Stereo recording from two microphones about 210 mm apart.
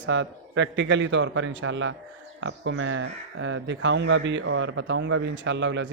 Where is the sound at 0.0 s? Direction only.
60° right (ahead or behind).